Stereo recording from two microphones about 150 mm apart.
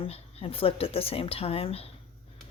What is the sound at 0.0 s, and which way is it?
Speech, 40° left (ahead or behind).